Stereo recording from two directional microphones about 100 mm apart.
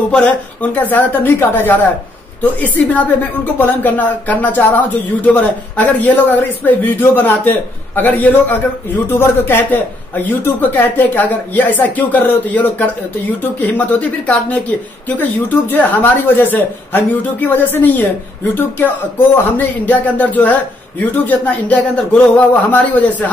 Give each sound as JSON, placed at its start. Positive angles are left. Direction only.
{"t": 0.1, "sound": "a man's voice", "side_deg": 15}